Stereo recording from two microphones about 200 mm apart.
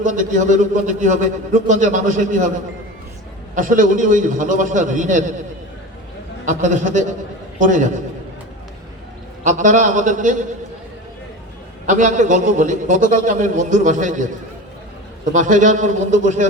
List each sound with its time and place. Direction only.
0.0 s a man's voice: 40° right (ahead or behind)
3.5 s a man's voice: 40° right (ahead or behind)
6.4 s a man's voice: 40° right (ahead or behind)
9.4 s a man's voice: 40° right (ahead or behind)
11.9 s a man's voice: 40° right (ahead or behind)